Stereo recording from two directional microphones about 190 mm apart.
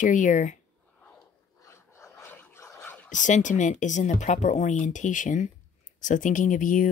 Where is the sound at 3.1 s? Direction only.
40° left (ahead or behind).